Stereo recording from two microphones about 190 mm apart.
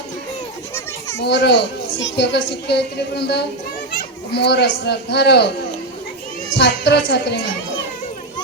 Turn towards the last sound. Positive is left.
turn(degrees=60)  # may be behind; listen again after turning